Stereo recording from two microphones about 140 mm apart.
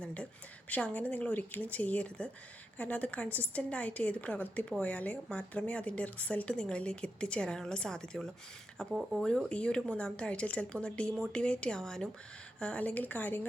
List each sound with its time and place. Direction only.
0.0 s a sound: 10° left (ahead or behind)
0.7 s a woman's voice: 10° left (ahead or behind)
8.9 s speech: 5° right (ahead or behind)
9.2 s a woman's voice: 5° left (ahead or behind)